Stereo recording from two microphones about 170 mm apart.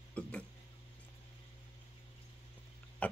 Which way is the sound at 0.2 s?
5° left (ahead or behind).